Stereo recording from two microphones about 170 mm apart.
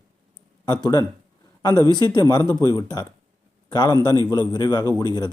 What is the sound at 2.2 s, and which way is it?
A man's voice, 20° left (ahead or behind).